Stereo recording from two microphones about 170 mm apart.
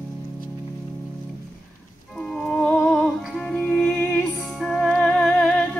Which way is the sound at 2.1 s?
5° left (ahead or behind).